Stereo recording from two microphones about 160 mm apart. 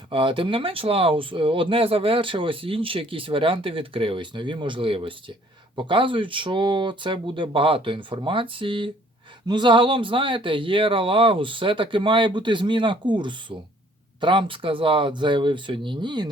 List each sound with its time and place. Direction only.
0.1 s speech: 30° right (ahead or behind)